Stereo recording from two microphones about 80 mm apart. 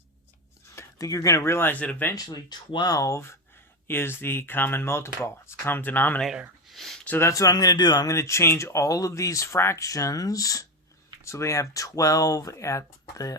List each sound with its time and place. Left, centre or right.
0.8 s speech: left
2.1 s speech: left
6.7 s a sound: centre
7.2 s speech: left
8.0 s speech: left